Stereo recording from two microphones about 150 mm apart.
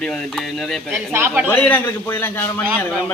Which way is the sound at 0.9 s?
15° right (ahead or behind).